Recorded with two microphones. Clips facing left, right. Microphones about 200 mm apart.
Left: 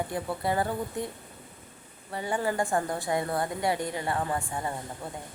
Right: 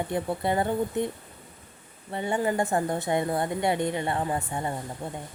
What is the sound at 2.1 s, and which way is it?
A woman's voice, 25° right (ahead or behind).